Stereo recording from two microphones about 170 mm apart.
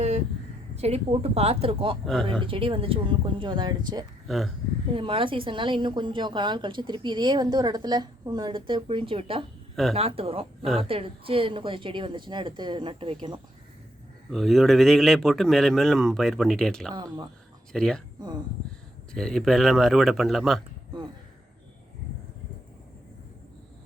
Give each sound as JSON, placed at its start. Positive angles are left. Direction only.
{"t": 0.8, "sound": "a woman's voice", "side_deg": -40}
{"t": 4.3, "sound": "a man's voice", "side_deg": 0}
{"t": 4.9, "sound": "a woman's voice", "side_deg": -30}
{"t": 14.3, "sound": "a man's voice", "side_deg": 0}
{"t": 16.9, "sound": "a woman's voice", "side_deg": -25}
{"t": 17.7, "sound": "speech", "side_deg": 5}
{"t": 19.1, "sound": "a man's voice", "side_deg": 5}